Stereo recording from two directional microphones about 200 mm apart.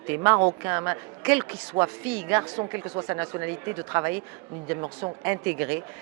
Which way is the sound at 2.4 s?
20° right (ahead or behind).